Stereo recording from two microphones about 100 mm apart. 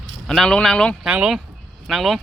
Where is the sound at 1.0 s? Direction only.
5° right (ahead or behind).